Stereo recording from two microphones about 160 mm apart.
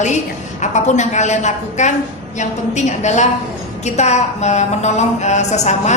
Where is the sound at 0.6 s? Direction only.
45° left (ahead or behind).